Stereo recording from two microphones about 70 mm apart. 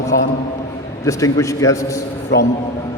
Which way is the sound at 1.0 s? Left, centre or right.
Left.